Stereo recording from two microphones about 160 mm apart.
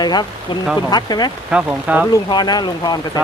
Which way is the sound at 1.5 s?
10° right (ahead or behind).